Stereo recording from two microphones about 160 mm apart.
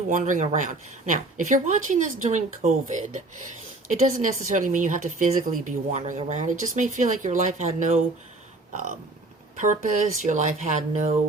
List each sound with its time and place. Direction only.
0.1 s a woman's voice: 50° right (ahead or behind)
8.7 s grunt: 50° right (ahead or behind)
10.2 s a woman's voice: 50° right (ahead or behind)